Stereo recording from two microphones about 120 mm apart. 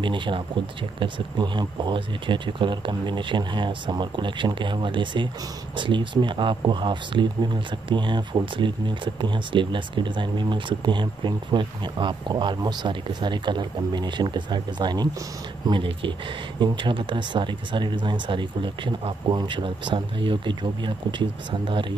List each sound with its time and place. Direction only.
0.0 s speech: 40° right (ahead or behind)